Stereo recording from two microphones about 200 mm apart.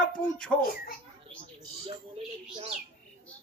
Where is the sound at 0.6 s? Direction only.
45° left (ahead or behind).